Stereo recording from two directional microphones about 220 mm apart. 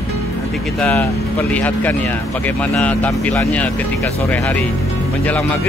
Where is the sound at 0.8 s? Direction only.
5° left (ahead or behind).